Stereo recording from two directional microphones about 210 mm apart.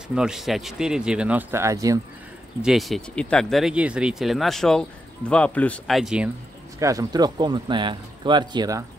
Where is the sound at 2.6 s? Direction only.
Centre (ahead or behind).